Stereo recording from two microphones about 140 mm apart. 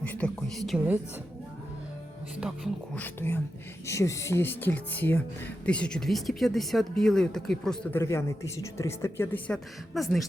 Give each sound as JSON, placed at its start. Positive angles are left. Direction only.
{"t": 0.0, "sound": "speech", "side_deg": 10}
{"t": 2.9, "sound": "speech", "side_deg": 15}
{"t": 7.9, "sound": "speech", "side_deg": 20}
{"t": 9.9, "sound": "speech", "side_deg": 0}